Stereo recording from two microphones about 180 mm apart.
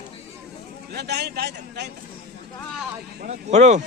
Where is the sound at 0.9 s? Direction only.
65° right (ahead or behind).